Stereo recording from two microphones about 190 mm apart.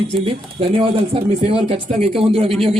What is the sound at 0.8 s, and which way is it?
Speech, 30° right (ahead or behind).